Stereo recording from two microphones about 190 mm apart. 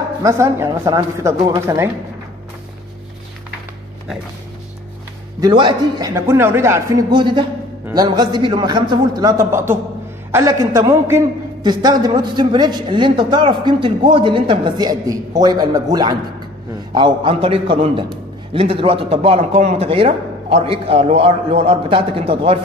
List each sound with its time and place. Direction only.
0.2 s speech: 15° right (ahead or behind)
5.4 s a man's voice: 25° right (ahead or behind)